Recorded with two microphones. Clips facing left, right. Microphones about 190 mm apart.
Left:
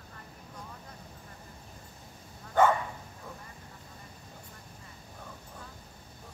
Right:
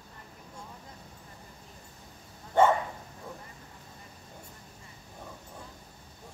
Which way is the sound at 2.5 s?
25° right (ahead or behind).